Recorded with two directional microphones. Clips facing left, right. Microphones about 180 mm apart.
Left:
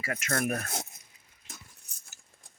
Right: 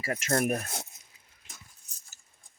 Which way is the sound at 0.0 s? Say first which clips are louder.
Right 4 dB; 30° right (ahead or behind).